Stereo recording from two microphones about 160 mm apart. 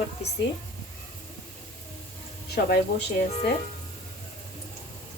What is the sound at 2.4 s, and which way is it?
Speech, 85° left.